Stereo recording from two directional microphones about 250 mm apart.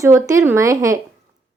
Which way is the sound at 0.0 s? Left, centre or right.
Centre.